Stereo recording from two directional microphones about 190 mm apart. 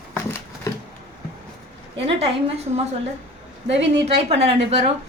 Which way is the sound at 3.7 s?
70° right (ahead or behind).